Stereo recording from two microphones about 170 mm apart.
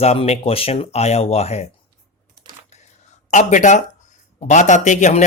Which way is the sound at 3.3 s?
45° left (ahead or behind).